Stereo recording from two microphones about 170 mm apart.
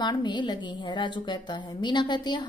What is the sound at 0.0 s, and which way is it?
A woman's voice, 25° left (ahead or behind).